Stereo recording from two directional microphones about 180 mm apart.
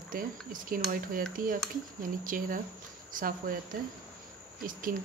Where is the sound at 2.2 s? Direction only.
50° right (ahead or behind).